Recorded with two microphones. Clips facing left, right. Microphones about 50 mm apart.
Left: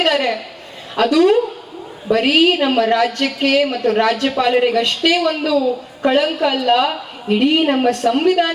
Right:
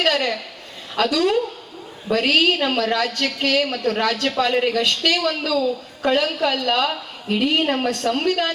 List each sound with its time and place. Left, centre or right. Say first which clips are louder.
0.0 s a woman's voice: left 4 dB; centre